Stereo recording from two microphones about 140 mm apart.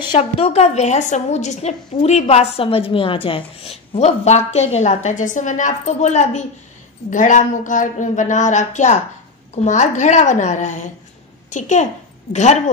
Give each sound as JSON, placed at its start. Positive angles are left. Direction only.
{"t": 0.0, "sound": "a woman's voice", "side_deg": 35}
{"t": 0.5, "sound": "a woman's voice", "side_deg": 50}